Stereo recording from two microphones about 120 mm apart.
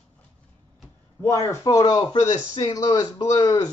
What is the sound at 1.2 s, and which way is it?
Speech, 25° left (ahead or behind).